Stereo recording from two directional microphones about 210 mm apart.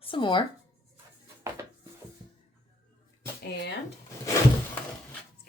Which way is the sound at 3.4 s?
50° left (ahead or behind).